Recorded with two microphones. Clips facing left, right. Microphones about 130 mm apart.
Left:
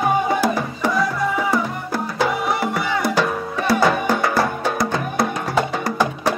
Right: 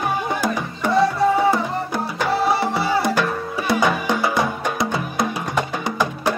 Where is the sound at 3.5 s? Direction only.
Centre (ahead or behind).